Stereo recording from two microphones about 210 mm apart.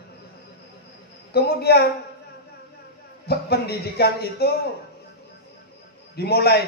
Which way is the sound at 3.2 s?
50° left (ahead or behind).